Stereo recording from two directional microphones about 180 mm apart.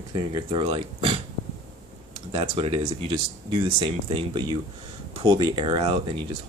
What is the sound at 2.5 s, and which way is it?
Speech, 30° right (ahead or behind).